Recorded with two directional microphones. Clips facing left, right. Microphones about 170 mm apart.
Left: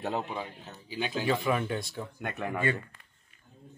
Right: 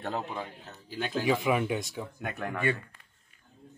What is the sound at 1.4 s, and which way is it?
Speech, 15° right (ahead or behind).